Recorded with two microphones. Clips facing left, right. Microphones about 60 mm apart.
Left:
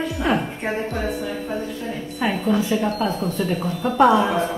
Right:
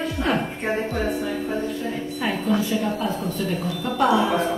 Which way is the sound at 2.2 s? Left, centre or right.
Centre.